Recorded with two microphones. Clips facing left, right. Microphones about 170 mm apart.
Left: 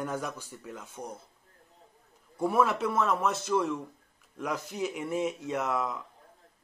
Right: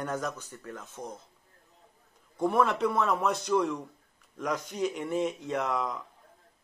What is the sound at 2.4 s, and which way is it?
Speech, 5° left (ahead or behind).